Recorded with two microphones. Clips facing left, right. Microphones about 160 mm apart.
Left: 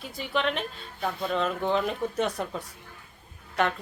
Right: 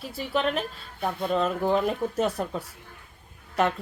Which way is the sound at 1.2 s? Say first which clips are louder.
Right 3 dB; 5° right (ahead or behind).